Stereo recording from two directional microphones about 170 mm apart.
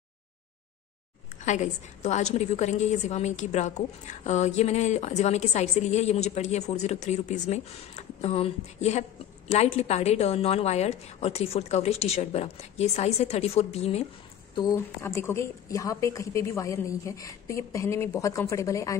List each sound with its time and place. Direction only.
1.4 s a woman's voice: 45° left (ahead or behind)
14.5 s a woman's voice: 25° left (ahead or behind)